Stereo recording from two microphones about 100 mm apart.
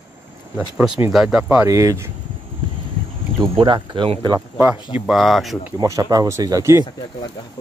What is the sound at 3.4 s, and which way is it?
Speech, 55° right (ahead or behind).